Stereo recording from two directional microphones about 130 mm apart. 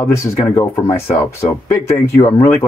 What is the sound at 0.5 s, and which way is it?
Speech, 20° left (ahead or behind).